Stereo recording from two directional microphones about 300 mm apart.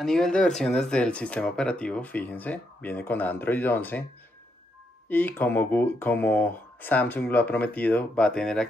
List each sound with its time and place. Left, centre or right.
0.0 s speech: centre
5.0 s speech: centre